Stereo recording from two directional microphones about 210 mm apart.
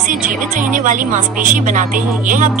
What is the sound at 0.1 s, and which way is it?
Speech, 40° right (ahead or behind).